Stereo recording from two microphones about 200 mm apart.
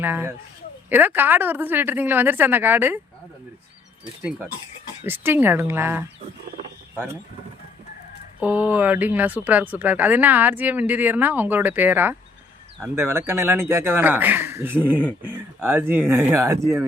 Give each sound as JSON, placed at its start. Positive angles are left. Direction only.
{"t": 0.0, "sound": "speech", "side_deg": -10}
{"t": 4.2, "sound": "speech", "side_deg": -5}
{"t": 8.4, "sound": "speech", "side_deg": -5}